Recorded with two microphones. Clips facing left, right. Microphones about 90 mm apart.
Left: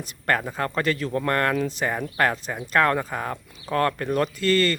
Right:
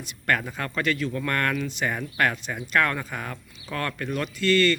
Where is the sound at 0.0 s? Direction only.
35° left (ahead or behind).